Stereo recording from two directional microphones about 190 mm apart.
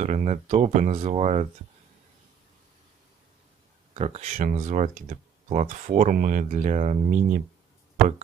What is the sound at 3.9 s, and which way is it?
Speech, 30° right (ahead or behind).